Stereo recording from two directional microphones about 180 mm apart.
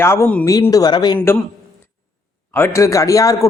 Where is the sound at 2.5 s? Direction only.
15° left (ahead or behind).